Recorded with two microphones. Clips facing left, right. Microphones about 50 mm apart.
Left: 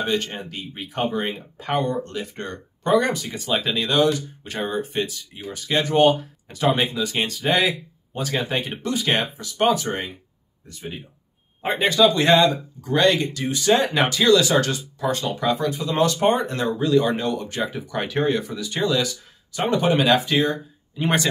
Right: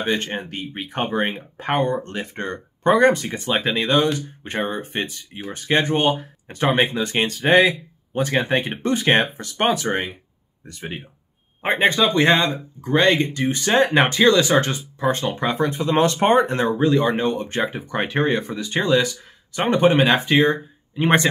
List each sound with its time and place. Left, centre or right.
0.0 s speech: right
7.5 s speech: centre
8.1 s speech: right